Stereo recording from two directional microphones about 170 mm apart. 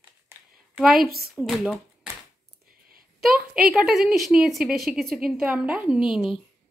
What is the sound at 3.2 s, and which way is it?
A woman's voice, 5° right (ahead or behind).